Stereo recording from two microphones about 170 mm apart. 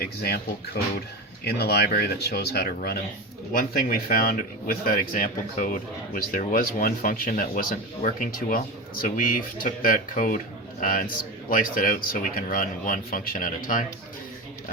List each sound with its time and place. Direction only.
0.0 s speech: 65° left (ahead or behind)
3.6 s speech: 55° left (ahead or behind)